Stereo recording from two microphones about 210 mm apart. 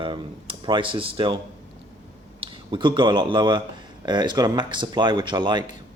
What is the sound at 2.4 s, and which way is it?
Speech, 25° right (ahead or behind).